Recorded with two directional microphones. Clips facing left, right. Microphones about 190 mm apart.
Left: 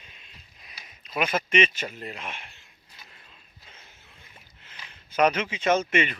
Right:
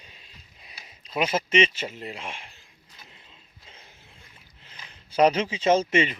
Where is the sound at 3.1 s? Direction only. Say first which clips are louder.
Right 1 dB; 25° right (ahead or behind).